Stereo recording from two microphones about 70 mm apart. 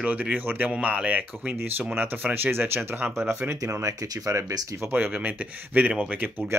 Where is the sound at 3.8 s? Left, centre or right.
Right.